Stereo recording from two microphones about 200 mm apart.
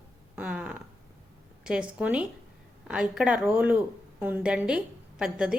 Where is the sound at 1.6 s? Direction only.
5° right (ahead or behind).